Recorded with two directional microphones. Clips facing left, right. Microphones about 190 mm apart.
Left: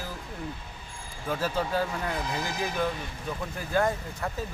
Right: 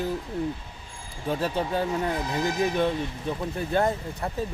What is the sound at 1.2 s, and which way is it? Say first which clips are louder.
Speech: right 2 dB; 25° right (ahead or behind).